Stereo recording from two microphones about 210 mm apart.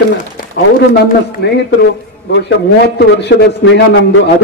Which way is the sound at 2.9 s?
50° left (ahead or behind).